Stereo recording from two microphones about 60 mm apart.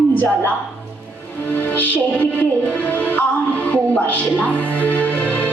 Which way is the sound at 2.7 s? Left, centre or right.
Left.